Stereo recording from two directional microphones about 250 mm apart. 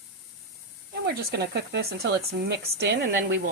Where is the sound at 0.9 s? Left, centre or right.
Right.